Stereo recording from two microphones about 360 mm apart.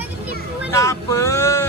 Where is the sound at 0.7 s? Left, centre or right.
Centre.